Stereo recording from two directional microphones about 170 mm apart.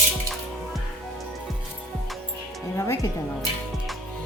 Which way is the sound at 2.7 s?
15° left (ahead or behind).